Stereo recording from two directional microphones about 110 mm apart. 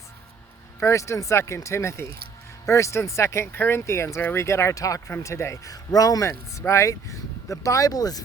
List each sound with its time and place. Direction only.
0.8 s speech: 25° left (ahead or behind)